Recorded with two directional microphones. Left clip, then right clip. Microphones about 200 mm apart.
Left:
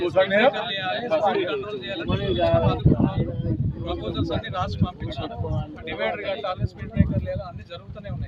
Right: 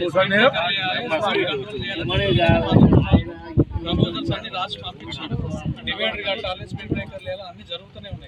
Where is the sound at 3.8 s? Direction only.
10° left (ahead or behind).